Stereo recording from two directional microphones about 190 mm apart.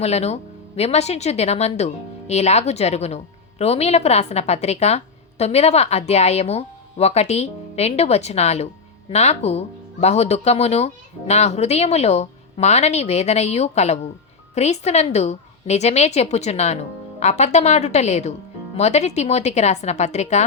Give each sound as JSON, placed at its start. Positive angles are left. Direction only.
{"t": 0.0, "sound": "a woman's voice", "side_deg": 35}